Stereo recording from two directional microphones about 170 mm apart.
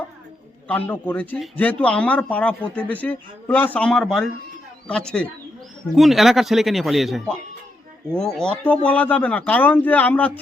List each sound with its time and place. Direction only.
0.7 s speech: 10° left (ahead or behind)